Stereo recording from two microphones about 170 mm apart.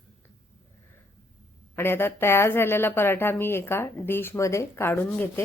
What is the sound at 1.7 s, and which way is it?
A woman's voice, 15° left (ahead or behind).